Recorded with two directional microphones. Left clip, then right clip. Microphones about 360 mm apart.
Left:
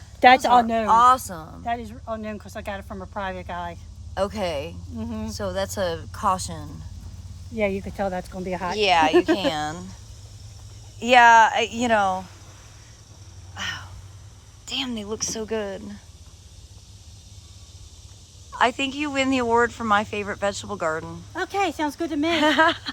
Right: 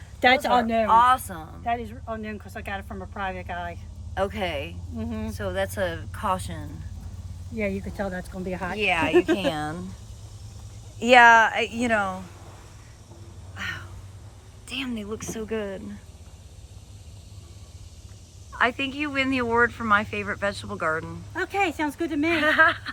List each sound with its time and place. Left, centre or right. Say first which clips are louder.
0.2 s speech: left 5 dB; centre
8.8 s speech: left 5 dB; centre
9.1 s speech: left 2 dB; left
9.5 s speech: left 2 dB; centre
11.0 s speech: left 1 dB; centre
13.5 s a sound: left 2 dB; centre
14.7 s speech: left 3 dB; centre
18.5 s speech: left 2 dB; centre
21.3 s speech: left 1 dB; centre
22.3 s speech: left 1 dB; centre